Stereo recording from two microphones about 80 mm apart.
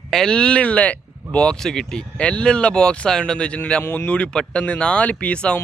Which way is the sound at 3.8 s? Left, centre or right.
Left.